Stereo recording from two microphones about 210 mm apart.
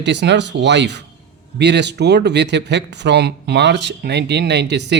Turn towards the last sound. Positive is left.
turn(degrees=-55)  # may be behind; listen again after turning